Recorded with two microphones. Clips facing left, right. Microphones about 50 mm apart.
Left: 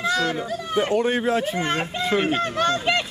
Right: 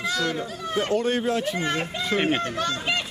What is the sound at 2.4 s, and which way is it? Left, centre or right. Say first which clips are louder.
Speech: left 5 dB; left.